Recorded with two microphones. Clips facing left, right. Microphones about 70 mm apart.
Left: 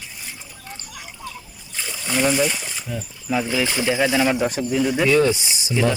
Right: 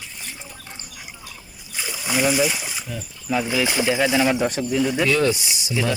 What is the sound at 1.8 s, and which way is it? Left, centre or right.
Splash, centre.